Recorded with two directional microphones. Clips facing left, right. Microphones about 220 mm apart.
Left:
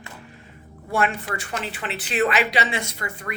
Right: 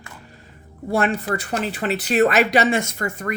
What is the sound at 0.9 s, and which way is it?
Speech, 35° right (ahead or behind).